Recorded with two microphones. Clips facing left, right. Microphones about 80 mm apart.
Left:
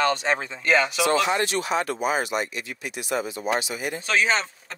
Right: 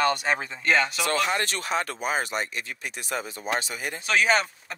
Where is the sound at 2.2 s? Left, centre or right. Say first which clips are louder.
Left 3 dB; right.